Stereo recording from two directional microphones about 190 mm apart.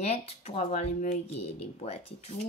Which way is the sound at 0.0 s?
35° left (ahead or behind).